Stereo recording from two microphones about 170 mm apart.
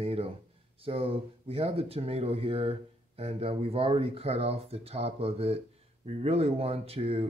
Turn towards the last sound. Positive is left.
turn(degrees=-35)  # may be behind; listen again after turning